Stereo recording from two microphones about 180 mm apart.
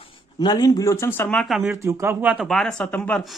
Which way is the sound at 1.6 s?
15° right (ahead or behind).